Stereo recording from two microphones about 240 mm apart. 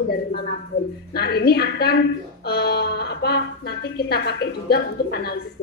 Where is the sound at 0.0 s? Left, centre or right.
Left.